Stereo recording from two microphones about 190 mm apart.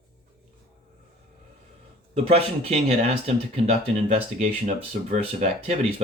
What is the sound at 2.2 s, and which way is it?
Speech, 30° right (ahead or behind).